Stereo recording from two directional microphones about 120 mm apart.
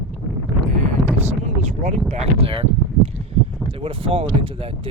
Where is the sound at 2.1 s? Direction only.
55° right (ahead or behind).